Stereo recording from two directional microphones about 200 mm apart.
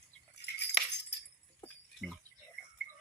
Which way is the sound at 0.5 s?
60° left (ahead or behind).